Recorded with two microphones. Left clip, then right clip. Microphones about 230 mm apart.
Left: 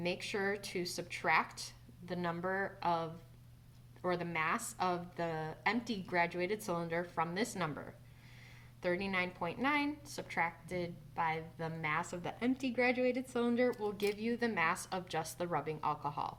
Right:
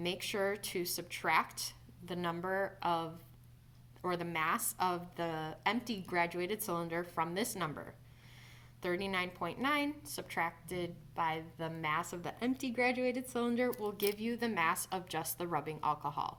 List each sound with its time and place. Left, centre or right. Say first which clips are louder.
0.0 s a woman's voice: right 1 dB; right
8.8 s a woman's voice: left 1 dB; right